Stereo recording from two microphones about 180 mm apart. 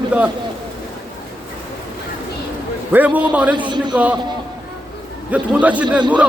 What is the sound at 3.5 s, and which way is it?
Speech, 25° right (ahead or behind).